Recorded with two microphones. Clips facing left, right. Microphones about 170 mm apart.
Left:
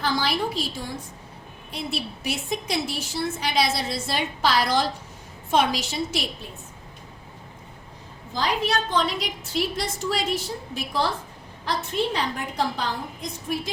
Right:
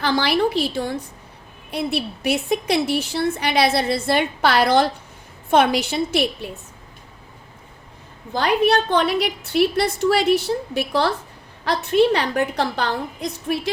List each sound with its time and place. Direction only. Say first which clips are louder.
0.0 s a woman's voice: right 6 dB; 70° right (ahead or behind)
8.3 s a woman's voice: right 7 dB; 60° right (ahead or behind)